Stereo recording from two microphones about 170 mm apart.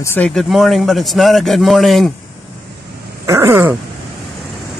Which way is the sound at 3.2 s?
15° right (ahead or behind).